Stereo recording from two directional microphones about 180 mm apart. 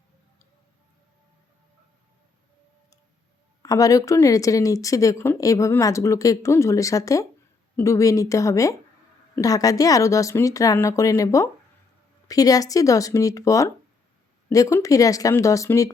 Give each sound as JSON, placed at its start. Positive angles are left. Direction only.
{"t": 3.6, "sound": "speech", "side_deg": 20}